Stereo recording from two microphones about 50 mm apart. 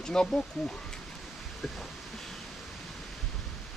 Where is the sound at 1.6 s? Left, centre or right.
Centre.